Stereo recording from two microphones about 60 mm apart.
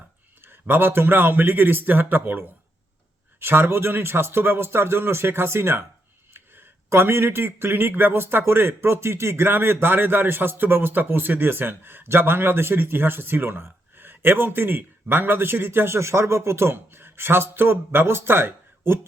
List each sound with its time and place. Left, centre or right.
0.4 s speech: right